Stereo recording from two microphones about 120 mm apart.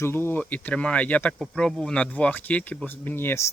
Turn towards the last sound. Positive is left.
turn(degrees=20)  # may be behind; listen again after turning